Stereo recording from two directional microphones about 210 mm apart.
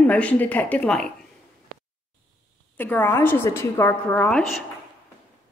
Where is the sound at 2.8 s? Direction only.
10° left (ahead or behind).